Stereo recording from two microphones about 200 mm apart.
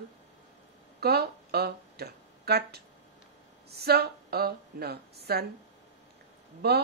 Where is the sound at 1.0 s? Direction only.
50° right (ahead or behind).